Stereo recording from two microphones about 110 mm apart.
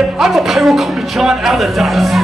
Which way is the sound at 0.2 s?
5° right (ahead or behind).